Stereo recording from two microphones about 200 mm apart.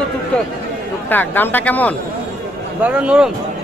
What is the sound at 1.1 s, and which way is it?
Speech, 10° left (ahead or behind).